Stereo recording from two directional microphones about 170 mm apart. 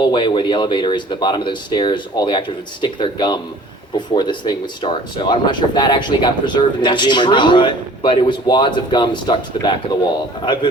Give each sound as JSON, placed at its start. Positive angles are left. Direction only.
{"t": 0.0, "sound": "speech", "side_deg": 25}